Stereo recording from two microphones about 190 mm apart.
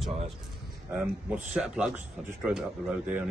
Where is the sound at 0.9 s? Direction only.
5° right (ahead or behind).